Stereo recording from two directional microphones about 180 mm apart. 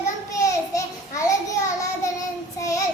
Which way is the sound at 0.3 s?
20° left (ahead or behind).